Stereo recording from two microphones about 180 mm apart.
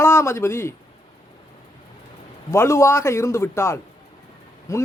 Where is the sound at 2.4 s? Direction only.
15° left (ahead or behind).